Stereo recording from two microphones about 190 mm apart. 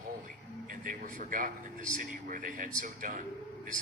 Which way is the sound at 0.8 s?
45° right (ahead or behind).